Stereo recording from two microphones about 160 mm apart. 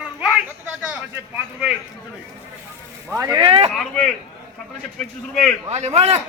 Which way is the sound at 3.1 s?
20° right (ahead or behind).